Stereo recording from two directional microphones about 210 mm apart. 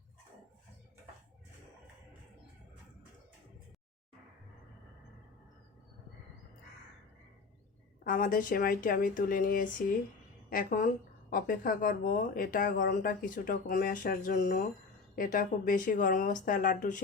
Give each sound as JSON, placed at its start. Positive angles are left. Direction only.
{"t": 8.0, "sound": "speech", "side_deg": 40}